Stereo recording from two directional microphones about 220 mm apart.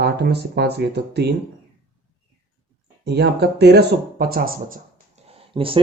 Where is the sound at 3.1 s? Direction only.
50° right (ahead or behind).